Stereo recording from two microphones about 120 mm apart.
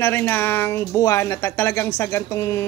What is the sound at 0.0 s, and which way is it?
Speech, 20° left (ahead or behind).